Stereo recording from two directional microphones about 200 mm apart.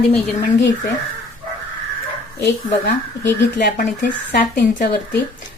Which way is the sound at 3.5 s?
40° left (ahead or behind).